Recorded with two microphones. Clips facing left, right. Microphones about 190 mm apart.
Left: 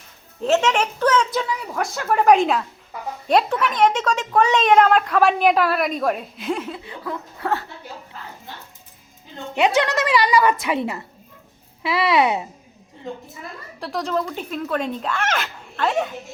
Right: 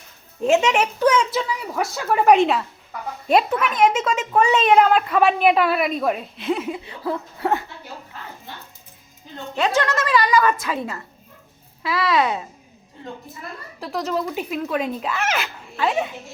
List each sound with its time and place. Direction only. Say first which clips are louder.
0.4 s a woman's voice: right 1 dB; 10° right (ahead or behind)
6.7 s speech: right 4 dB; 15° right (ahead or behind)
7.0 s speech: right 4 dB; 30° right (ahead or behind)
9.6 s a woman's voice: left 2 dB; 15° left (ahead or behind)
13.7 s speech: left 1 dB; 5° right (ahead or behind)